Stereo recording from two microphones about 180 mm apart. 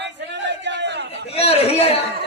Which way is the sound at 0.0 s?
75° right (ahead or behind).